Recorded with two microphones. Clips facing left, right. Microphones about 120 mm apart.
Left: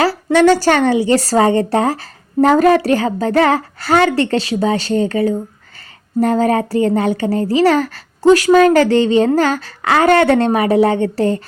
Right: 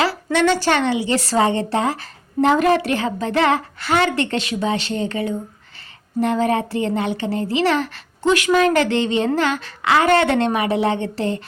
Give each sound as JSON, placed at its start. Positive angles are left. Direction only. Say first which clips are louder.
{"t": 0.0, "sound": "a woman's voice", "louder": "left 6 dB", "side_deg": 40}